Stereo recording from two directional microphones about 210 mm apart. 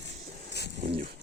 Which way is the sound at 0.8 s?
40° right (ahead or behind).